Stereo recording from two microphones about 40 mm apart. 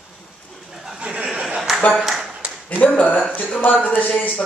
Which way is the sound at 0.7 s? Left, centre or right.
Centre.